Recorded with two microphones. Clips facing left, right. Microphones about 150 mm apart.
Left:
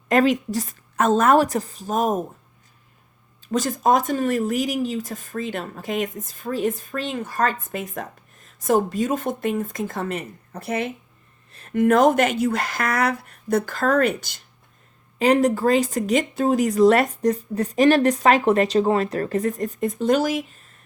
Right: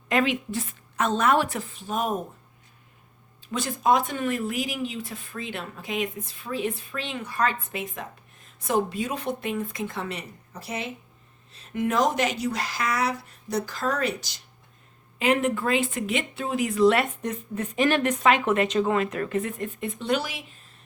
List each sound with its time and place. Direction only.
0.1 s speech: 40° left (ahead or behind)
3.5 s speech: 45° left (ahead or behind)
15.2 s speech: 40° left (ahead or behind)